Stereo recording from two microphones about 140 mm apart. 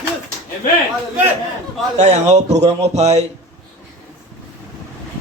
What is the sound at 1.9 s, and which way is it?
A man's voice, 55° right (ahead or behind).